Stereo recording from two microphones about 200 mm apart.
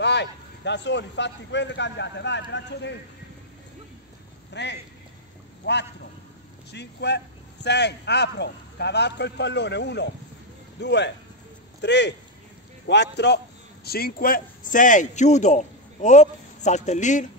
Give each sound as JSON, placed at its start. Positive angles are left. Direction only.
{"t": 0.0, "sound": "speech", "side_deg": 60}
{"t": 4.6, "sound": "a man's voice", "side_deg": 60}